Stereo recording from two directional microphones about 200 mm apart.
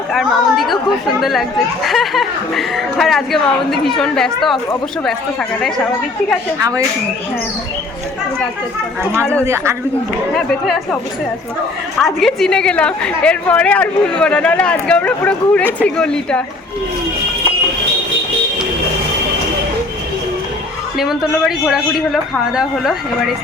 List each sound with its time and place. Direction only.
0.1 s a woman's voice: centre (ahead or behind)
6.6 s a man's voice: 15° right (ahead or behind)
9.4 s a man's voice: 15° right (ahead or behind)
10.3 s a woman's voice: centre (ahead or behind)
11.9 s a woman's voice: centre (ahead or behind)
21.0 s a woman's voice: centre (ahead or behind)